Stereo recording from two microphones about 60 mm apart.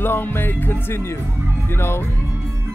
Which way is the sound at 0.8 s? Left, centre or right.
Left.